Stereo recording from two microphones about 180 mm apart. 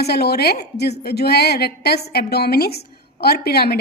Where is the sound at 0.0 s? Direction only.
65° left (ahead or behind).